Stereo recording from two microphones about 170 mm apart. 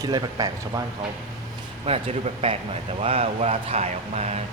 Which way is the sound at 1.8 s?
35° right (ahead or behind).